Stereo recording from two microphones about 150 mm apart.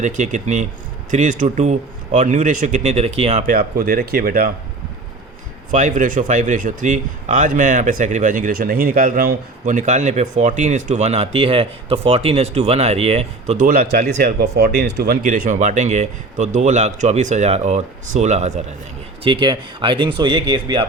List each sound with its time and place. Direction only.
0.0 s speech: 55° right (ahead or behind); by 4.5 s 75° right (ahead or behind)
5.7 s speech: 60° right (ahead or behind)
13.7 s speech: 85° right; by 18.6 s 50° right (ahead or behind)
19.2 s speech: 30° right (ahead or behind)